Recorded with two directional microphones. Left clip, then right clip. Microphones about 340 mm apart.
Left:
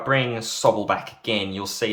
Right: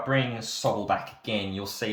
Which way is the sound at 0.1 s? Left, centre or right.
Centre.